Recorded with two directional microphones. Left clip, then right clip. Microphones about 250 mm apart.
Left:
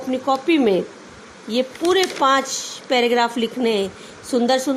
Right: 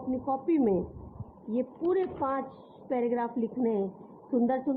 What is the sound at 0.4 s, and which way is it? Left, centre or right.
A woman's voice, left.